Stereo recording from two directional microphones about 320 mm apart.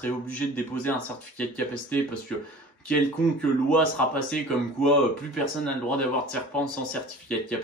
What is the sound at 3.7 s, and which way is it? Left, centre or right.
Speech, centre.